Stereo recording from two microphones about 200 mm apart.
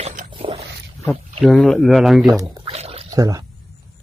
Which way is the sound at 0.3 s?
25° right (ahead or behind).